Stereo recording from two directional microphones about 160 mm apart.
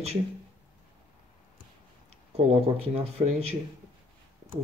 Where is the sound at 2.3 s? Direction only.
40° right (ahead or behind).